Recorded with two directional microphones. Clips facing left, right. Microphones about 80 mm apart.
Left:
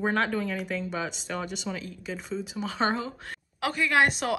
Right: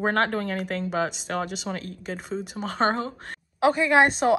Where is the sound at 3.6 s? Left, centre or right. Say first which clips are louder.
Right 5 dB; right.